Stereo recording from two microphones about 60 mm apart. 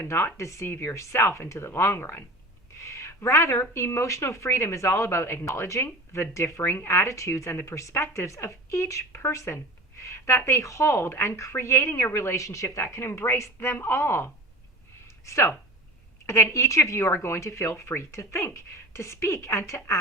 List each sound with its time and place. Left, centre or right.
0.0 s speech: left
5.5 s speech: left
15.0 s a sound: left
16.2 s speech: left